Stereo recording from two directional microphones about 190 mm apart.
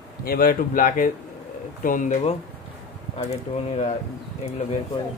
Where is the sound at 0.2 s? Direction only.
50° left (ahead or behind); by 3.9 s 35° left (ahead or behind).